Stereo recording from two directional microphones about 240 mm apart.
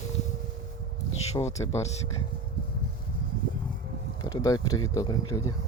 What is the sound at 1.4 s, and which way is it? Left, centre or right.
Speech, centre.